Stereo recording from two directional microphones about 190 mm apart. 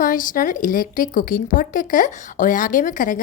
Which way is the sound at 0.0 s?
45° left (ahead or behind).